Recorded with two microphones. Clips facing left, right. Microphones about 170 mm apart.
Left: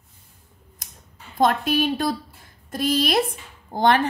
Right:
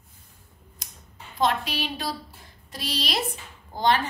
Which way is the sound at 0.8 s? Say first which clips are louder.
Even; 50° left (ahead or behind).